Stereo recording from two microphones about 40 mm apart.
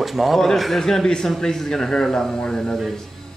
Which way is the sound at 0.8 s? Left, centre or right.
Centre.